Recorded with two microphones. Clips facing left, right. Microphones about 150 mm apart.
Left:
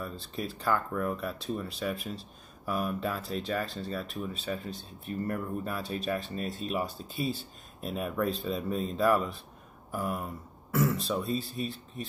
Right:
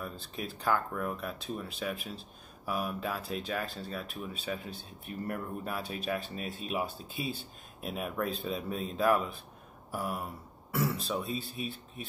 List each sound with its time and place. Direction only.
0.4 s speech: centre (ahead or behind)
9.8 s a sound: 5° right (ahead or behind)
11.0 s speech: centre (ahead or behind)